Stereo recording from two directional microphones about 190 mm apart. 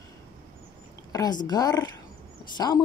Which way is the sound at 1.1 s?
20° left (ahead or behind).